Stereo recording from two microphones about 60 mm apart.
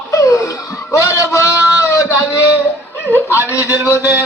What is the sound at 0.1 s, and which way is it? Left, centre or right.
Laughter, left.